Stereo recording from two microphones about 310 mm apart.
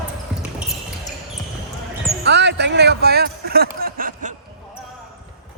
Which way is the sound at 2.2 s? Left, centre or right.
Right.